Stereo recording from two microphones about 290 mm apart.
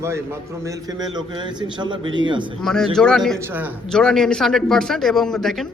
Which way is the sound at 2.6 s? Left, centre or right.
Centre.